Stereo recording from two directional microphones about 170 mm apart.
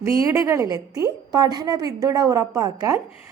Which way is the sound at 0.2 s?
20° right (ahead or behind).